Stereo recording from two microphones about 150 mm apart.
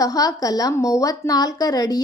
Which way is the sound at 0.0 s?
25° left (ahead or behind).